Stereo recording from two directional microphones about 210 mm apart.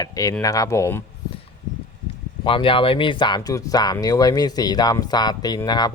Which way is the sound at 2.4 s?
25° left (ahead or behind).